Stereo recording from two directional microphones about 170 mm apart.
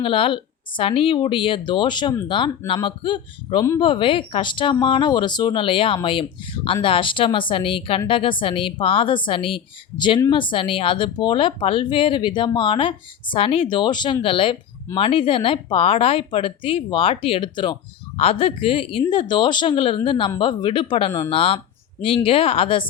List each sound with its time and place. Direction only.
0.0 s a woman's voice: 30° left (ahead or behind)